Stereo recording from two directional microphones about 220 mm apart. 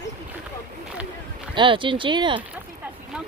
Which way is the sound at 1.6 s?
20° right (ahead or behind).